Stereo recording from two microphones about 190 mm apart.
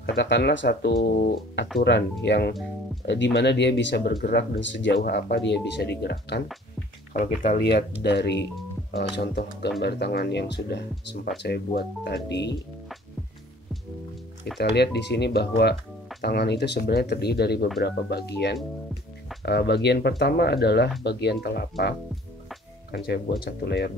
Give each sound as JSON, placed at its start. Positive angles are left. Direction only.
{"t": 0.0, "sound": "speech", "side_deg": 65}
{"t": 1.8, "sound": "speech", "side_deg": 60}
{"t": 7.2, "sound": "speech", "side_deg": 40}
{"t": 7.5, "sound": "speech", "side_deg": 60}
{"t": 14.6, "sound": "speech", "side_deg": 60}